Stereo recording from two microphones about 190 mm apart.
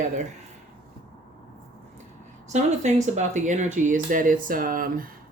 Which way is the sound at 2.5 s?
40° right (ahead or behind).